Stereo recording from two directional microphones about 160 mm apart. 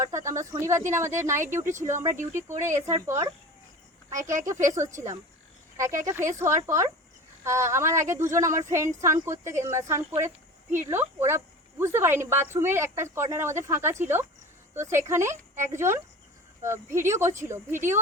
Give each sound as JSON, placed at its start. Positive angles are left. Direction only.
{"t": 0.0, "sound": "speech", "side_deg": -20}
{"t": 4.3, "sound": "speech", "side_deg": -20}